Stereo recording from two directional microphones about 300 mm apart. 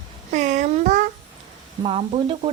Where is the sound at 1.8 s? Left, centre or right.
Centre.